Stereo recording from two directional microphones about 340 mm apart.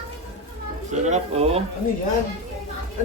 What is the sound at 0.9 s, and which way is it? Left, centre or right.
Speech, right.